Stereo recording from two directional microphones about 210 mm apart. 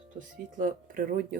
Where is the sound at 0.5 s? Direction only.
40° right (ahead or behind).